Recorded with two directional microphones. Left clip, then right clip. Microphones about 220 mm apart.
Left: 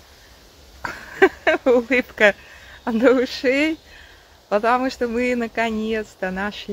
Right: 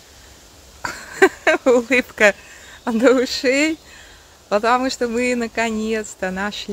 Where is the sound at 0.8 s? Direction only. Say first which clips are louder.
Right 1 dB; 5° right (ahead or behind).